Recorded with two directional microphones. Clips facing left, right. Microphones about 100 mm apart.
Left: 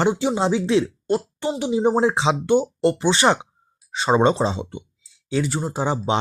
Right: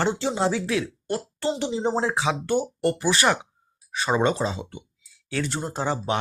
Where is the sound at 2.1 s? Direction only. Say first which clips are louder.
Left 5 dB; 25° left (ahead or behind).